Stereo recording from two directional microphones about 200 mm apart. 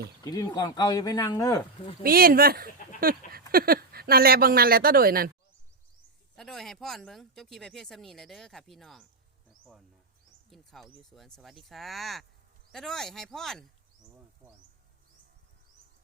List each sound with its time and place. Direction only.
0.3 s speech: 20° left (ahead or behind)
2.0 s speech: 45° right (ahead or behind)
3.0 s a sound: 45° right (ahead or behind)
3.5 s speech: 50° right (ahead or behind)
6.3 s speech: centre (ahead or behind)
9.5 s a sound: centre (ahead or behind)
10.5 s speech: centre (ahead or behind)